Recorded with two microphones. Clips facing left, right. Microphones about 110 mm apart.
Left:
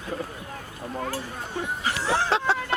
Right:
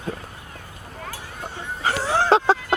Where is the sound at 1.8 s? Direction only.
40° right (ahead or behind).